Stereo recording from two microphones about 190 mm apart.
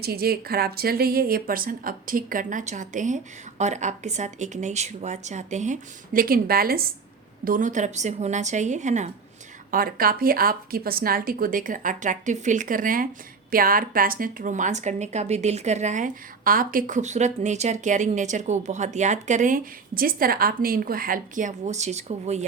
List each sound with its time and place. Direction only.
0.0 s a woman's voice: 55° right (ahead or behind); by 9.0 s 40° right (ahead or behind)
9.7 s a woman's voice: 50° right (ahead or behind)